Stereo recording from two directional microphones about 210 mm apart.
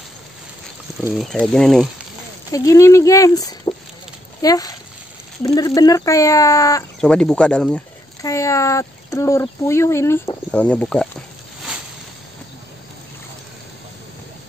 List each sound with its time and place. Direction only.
1.1 s speech: centre (ahead or behind)
2.5 s speech: 15° left (ahead or behind)
7.0 s speech: 5° left (ahead or behind)